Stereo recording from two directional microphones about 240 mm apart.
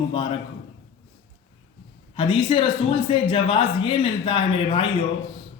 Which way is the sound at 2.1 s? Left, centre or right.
Centre.